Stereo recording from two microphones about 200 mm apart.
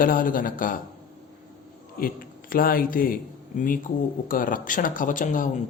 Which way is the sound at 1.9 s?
45° left (ahead or behind).